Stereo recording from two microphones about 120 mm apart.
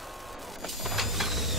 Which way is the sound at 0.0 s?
Centre (ahead or behind).